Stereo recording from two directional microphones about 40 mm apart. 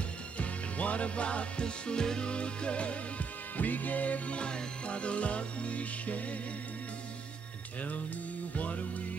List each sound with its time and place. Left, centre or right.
0.4 s music: left
4.4 s music: left
8.5 s music: left